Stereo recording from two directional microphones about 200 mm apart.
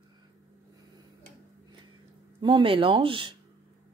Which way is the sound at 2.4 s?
25° right (ahead or behind).